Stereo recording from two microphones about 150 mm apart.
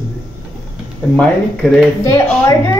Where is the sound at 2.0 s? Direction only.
20° left (ahead or behind).